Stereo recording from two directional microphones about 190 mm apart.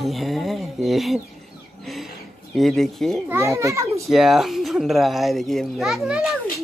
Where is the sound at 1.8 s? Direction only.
Centre (ahead or behind).